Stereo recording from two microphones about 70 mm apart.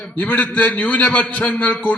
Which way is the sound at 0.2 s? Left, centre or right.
Left.